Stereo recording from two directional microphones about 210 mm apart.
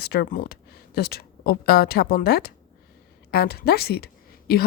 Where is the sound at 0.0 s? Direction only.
50° left (ahead or behind).